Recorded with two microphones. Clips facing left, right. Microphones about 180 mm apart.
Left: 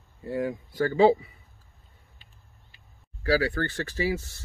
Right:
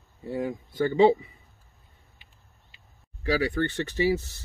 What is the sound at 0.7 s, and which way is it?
Speech, 20° right (ahead or behind).